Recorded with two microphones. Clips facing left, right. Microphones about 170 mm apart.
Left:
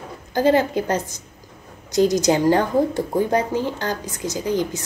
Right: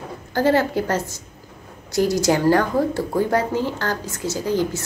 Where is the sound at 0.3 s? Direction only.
15° left (ahead or behind).